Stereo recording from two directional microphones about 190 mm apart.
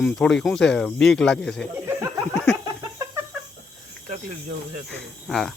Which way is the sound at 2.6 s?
15° right (ahead or behind).